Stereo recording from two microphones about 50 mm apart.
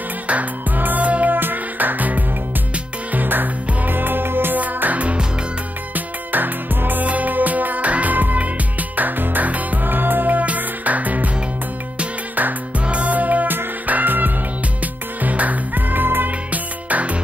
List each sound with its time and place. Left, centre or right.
0.3 s music: right
4.6 s music: right
5.9 s music: right
12.8 s music: right